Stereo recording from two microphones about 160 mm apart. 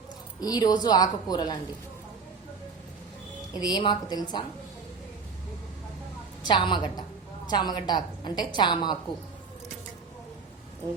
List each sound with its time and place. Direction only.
0.3 s a woman's voice: 25° left (ahead or behind)
3.5 s a woman's voice: 25° left (ahead or behind)
6.4 s a woman's voice: 30° left (ahead or behind)